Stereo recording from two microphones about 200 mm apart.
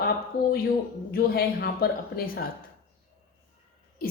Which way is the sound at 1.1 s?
50° left (ahead or behind).